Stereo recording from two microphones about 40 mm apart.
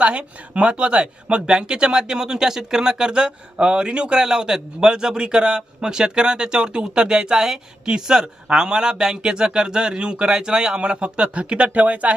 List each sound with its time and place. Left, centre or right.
0.0 s speech: right